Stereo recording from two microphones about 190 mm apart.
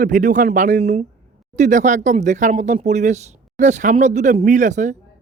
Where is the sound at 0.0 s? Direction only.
45° right (ahead or behind).